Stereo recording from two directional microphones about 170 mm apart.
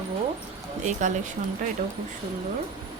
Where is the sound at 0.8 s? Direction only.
45° right (ahead or behind).